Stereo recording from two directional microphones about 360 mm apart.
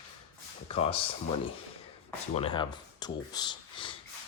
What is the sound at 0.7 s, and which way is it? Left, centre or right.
Speech, centre.